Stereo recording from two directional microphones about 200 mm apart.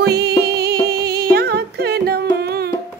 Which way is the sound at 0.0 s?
55° right (ahead or behind).